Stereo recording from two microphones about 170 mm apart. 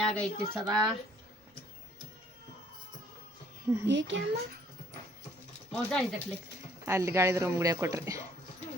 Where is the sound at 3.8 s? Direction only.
90° right.